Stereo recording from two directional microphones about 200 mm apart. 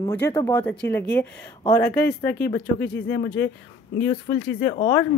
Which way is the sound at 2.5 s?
55° left (ahead or behind).